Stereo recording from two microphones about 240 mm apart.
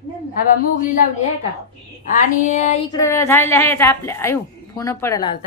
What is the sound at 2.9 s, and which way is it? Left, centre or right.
A woman's voice, centre.